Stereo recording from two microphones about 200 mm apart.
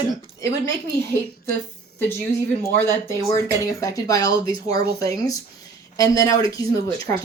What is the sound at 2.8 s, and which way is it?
Speech, 15° left (ahead or behind).